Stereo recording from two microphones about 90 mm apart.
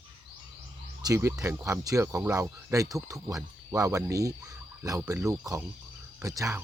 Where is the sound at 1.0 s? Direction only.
40° right (ahead or behind).